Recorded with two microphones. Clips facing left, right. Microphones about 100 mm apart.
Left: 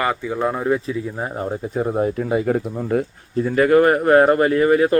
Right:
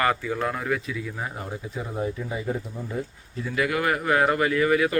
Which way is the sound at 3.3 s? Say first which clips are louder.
Left 12 dB; 45° left (ahead or behind).